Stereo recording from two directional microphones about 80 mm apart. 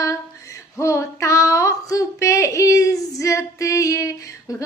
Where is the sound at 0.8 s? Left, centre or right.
Left.